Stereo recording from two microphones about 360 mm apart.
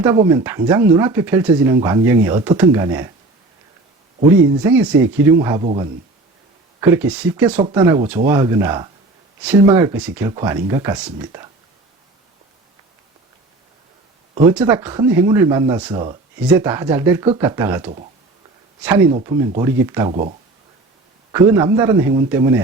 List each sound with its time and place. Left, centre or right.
0.0 s speech: centre
4.6 s speech: centre
14.5 s speech: centre
21.3 s speech: centre